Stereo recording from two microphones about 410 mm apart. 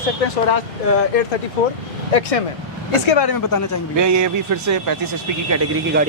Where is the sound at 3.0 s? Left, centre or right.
Left.